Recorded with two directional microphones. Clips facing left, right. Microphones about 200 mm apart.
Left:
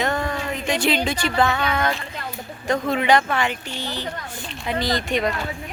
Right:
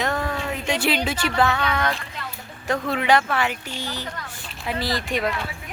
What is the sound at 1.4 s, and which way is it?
Speech, centre (ahead or behind).